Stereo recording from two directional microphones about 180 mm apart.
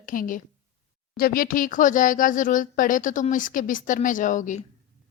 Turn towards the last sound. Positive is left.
turn(degrees=45)  # may be behind; listen again after turning